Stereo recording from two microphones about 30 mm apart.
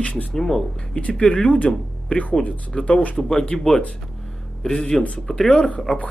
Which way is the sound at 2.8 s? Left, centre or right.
Left.